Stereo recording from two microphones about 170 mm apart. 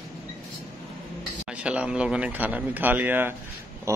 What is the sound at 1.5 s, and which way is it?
Speech, 5° right (ahead or behind).